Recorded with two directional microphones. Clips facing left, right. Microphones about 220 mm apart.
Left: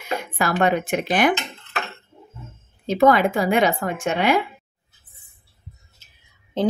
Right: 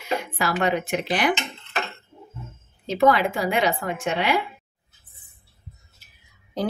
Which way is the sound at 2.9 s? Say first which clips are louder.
Left 3 dB; 50° left (ahead or behind).